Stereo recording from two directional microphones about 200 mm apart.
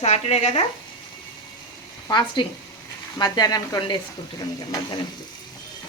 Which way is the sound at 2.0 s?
20° left (ahead or behind).